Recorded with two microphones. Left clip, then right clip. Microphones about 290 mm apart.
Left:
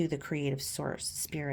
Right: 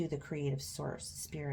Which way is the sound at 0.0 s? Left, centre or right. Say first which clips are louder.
Left 5 dB; left.